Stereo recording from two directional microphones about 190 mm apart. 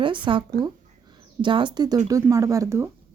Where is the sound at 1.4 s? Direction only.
25° right (ahead or behind).